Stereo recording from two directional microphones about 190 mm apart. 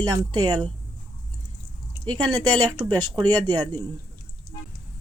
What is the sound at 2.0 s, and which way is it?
Speech, 25° right (ahead or behind).